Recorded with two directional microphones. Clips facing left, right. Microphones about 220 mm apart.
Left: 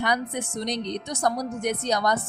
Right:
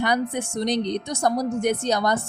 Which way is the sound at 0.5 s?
30° right (ahead or behind).